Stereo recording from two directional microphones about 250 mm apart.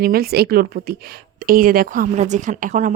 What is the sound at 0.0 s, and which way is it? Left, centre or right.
A woman's voice, right.